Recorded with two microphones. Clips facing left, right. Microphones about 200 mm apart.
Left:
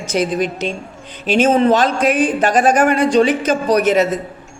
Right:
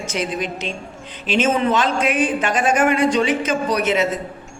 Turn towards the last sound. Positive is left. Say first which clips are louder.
# left 5 dB
turn(degrees=40)  # may be behind; listen again after turning